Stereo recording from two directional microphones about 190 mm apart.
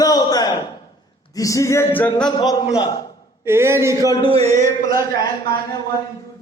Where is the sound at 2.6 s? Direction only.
25° left (ahead or behind).